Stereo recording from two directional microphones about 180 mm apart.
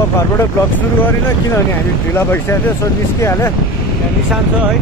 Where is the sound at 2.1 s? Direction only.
10° left (ahead or behind).